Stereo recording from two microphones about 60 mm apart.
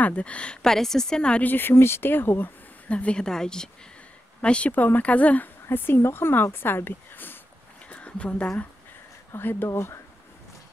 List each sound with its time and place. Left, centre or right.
0.0 s speech: left
1.4 s speech: left
2.9 s speech: centre
5.7 s speech: left
7.9 s a sound: left
9.3 s speech: left
9.7 s speech: left